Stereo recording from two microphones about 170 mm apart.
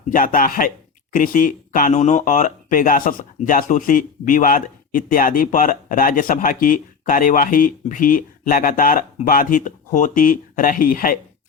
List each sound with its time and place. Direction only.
0.1 s a man's voice: 55° left (ahead or behind)